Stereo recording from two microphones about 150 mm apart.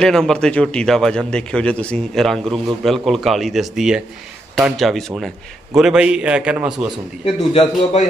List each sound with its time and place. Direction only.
0.0 s a man's voice: 5° left (ahead or behind)
7.2 s a man's voice: 45° left (ahead or behind)